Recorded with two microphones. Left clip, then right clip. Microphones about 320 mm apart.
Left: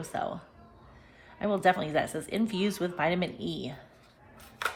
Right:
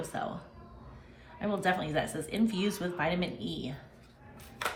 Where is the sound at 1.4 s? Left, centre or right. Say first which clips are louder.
Left 5 dB; left.